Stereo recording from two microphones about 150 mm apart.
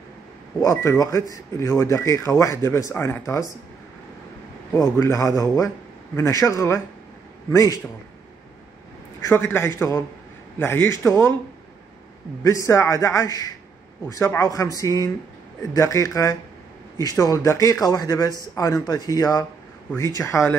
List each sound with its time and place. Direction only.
0.7 s speech: 20° left (ahead or behind)
4.9 s speech: 20° left (ahead or behind)
9.2 s a man's voice: 15° left (ahead or behind)
12.4 s speech: 20° left (ahead or behind)